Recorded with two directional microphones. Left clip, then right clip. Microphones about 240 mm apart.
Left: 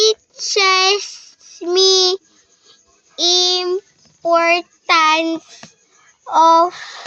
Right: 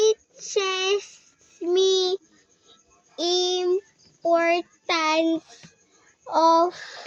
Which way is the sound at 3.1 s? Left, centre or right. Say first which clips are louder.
Left 9 dB; centre.